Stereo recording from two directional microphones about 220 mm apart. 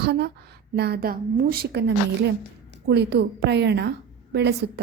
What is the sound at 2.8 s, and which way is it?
A woman's voice, 50° right (ahead or behind).